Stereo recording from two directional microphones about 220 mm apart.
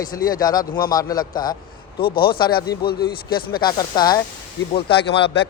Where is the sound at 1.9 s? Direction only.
45° left (ahead or behind).